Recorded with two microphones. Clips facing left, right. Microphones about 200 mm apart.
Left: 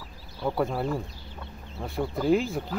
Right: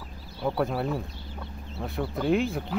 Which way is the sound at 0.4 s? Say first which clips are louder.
Even; centre (ahead or behind).